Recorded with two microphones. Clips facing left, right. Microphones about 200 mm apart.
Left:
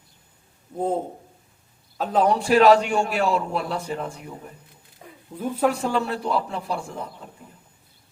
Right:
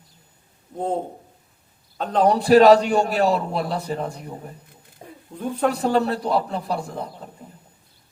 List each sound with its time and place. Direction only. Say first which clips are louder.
0.8 s a man's voice: even; 5° left (ahead or behind)
2.2 s a man's voice: right 4 dB; 35° right (ahead or behind)
5.0 s a sound: right 4 dB; 30° right (ahead or behind)
5.4 s speech: even; 5° left (ahead or behind)
5.7 s a man's voice: right 4 dB; 40° right (ahead or behind)